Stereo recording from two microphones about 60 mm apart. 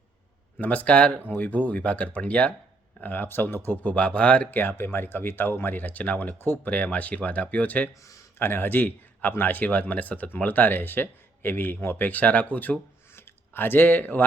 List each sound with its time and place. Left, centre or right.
0.6 s speech: left
3.8 s speech: left
4.6 s speech: left
8.4 s a man's voice: left